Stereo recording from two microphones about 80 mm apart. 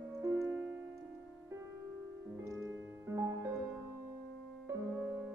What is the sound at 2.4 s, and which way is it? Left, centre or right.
Music, right.